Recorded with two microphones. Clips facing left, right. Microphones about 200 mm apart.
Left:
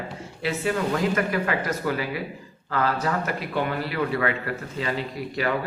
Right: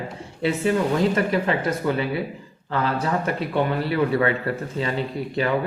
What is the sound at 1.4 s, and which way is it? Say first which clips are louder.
Speech: right 3 dB; 25° right (ahead or behind).